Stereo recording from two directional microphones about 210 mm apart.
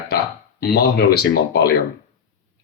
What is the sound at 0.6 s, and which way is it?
Speech, 50° left (ahead or behind).